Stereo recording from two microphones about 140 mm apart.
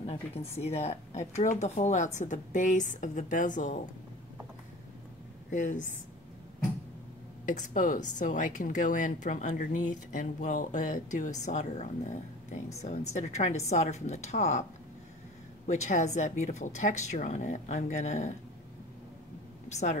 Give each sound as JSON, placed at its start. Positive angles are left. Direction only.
{"t": 0.0, "sound": "speech", "side_deg": 45}
{"t": 5.5, "sound": "speech", "side_deg": 65}
{"t": 7.4, "sound": "a woman's voice", "side_deg": 70}
{"t": 19.7, "sound": "speech", "side_deg": 55}